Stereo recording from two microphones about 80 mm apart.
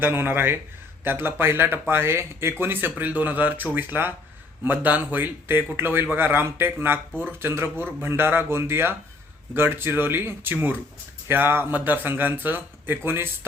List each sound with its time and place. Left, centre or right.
0.0 s speech: right